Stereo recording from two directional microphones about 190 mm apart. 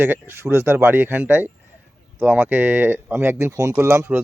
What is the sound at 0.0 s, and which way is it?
Speech, 10° right (ahead or behind).